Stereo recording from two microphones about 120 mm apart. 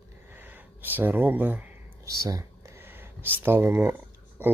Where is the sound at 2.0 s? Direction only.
30° right (ahead or behind).